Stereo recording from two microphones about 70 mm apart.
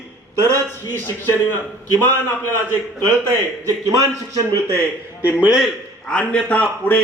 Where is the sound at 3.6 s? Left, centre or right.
Right.